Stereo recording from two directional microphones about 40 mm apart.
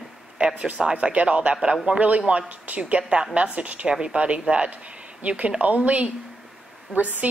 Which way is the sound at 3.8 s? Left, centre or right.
Right.